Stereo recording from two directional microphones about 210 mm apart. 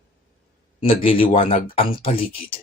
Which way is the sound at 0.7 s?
25° left (ahead or behind).